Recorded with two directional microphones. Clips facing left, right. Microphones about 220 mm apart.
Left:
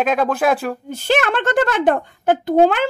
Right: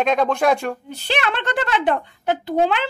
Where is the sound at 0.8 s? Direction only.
45° left (ahead or behind).